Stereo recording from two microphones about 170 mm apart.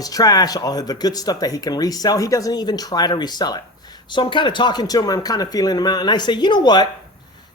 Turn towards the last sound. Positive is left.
turn(degrees=25)  # may be behind; listen again after turning